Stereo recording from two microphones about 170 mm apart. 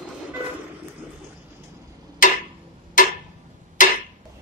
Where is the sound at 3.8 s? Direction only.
50° left (ahead or behind).